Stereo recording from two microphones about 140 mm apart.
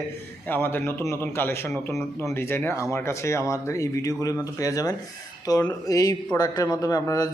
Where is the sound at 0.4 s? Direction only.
15° left (ahead or behind).